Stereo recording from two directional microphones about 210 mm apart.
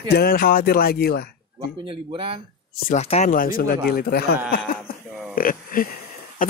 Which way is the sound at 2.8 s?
35° left (ahead or behind).